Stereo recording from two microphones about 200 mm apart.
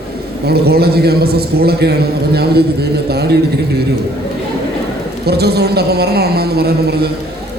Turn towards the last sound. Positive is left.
turn(degrees=-50)  # may be behind; listen again after turning